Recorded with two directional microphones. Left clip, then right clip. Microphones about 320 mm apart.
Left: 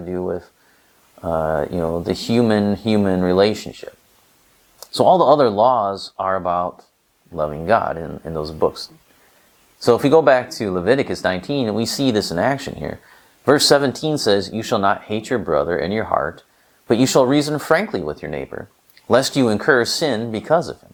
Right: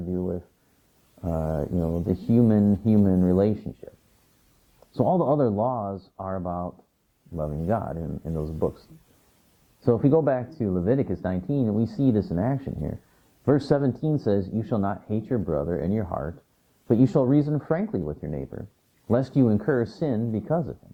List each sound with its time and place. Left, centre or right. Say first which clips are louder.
0.1 s speech: left 7 dB; centre
2.0 s speech: left 4 dB; centre
4.9 s speech: left 10 dB; left
5.3 s speech: left 10 dB; centre
9.9 s speech: left 9 dB; centre